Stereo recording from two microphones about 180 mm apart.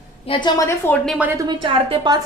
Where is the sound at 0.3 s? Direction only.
25° left (ahead or behind).